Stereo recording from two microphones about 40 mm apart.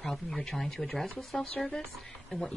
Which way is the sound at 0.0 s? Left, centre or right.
Centre.